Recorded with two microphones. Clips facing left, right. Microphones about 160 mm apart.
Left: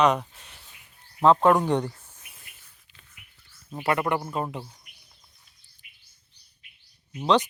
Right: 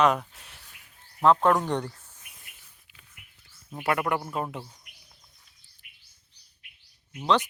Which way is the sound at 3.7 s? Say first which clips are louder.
Left 2 dB; centre (ahead or behind).